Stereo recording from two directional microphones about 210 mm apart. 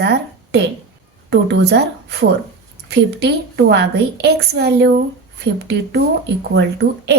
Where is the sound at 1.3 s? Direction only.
55° right (ahead or behind).